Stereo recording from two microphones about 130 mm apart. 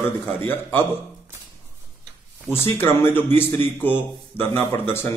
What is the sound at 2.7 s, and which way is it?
A man's voice, 15° left (ahead or behind).